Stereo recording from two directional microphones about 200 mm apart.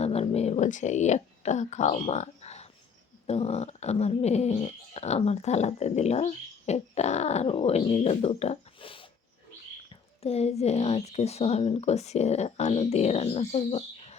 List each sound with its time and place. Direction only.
0.0 s a sound: 30° left (ahead or behind)
3.2 s speech: 30° left (ahead or behind)
10.2 s speech: 30° left (ahead or behind)